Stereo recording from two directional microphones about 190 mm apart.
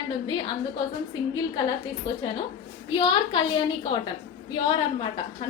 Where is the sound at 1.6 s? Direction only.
25° left (ahead or behind).